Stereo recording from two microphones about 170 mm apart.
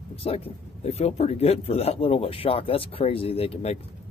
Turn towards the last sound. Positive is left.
turn(degrees=35)  # may be behind; listen again after turning